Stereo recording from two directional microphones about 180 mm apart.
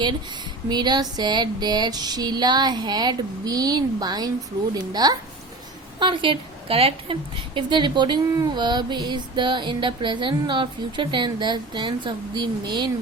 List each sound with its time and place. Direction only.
0.7 s a woman's voice: 25° right (ahead or behind)